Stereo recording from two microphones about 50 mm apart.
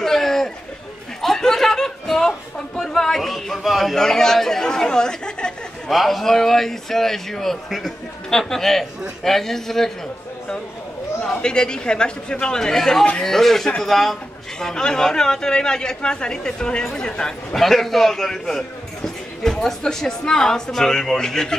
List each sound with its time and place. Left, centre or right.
0.0 s chatter: centre
1.2 s music: centre
3.9 s a woman's voice: centre
5.9 s a woman's voice: centre
11.4 s a woman's voice: centre
17.6 s a woman's voice: centre